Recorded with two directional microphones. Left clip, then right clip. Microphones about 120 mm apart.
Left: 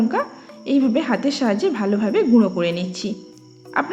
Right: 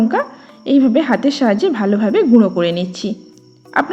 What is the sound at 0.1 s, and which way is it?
A woman's voice, 40° right (ahead or behind).